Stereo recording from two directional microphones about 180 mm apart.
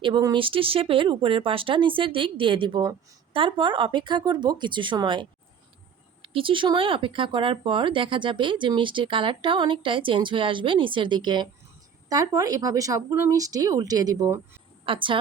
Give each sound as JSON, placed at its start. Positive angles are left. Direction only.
{"t": 0.0, "sound": "speech", "side_deg": -25}
{"t": 14.8, "sound": "speech", "side_deg": -30}